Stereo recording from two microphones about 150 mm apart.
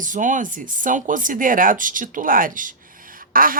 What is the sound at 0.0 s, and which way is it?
A woman's voice, 60° right (ahead or behind).